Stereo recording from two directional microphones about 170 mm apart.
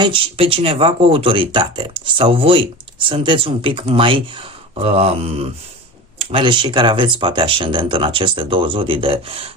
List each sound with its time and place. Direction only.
0.0 s speech: 30° right (ahead or behind)